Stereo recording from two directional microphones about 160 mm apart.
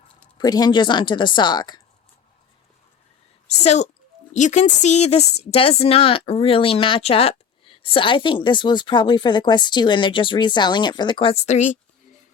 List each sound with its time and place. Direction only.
0.3 s speech: 25° left (ahead or behind)
3.6 s speech: 45° left (ahead or behind)